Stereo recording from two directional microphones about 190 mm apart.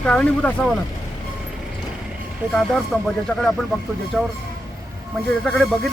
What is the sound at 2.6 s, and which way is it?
Speech, 5° left (ahead or behind).